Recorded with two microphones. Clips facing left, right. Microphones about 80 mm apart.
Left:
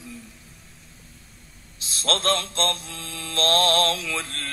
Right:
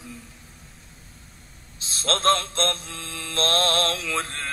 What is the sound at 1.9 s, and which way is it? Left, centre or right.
Mantra, right.